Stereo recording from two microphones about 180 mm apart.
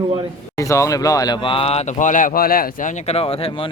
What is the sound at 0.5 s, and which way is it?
Speech, 15° left (ahead or behind).